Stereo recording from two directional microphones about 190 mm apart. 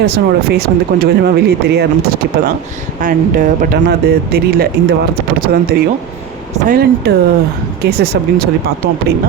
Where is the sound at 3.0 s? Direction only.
45° right (ahead or behind).